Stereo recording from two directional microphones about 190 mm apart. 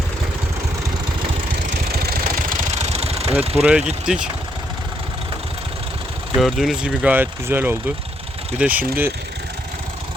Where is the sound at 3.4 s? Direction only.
30° right (ahead or behind).